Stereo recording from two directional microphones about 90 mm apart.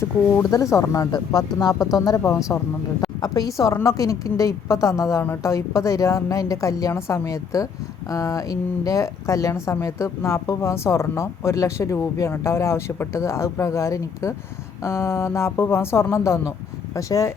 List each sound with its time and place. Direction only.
0.5 s speech: 35° left (ahead or behind)
3.2 s a woman's voice: 45° left (ahead or behind)